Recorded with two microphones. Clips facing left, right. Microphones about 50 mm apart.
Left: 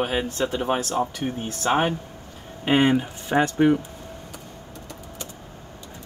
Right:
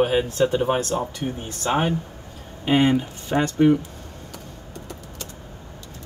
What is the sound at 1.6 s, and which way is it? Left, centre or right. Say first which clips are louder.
Speech: even; left.